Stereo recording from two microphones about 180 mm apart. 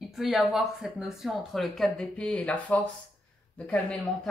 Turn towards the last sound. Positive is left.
turn(degrees=5)  # may be behind; listen again after turning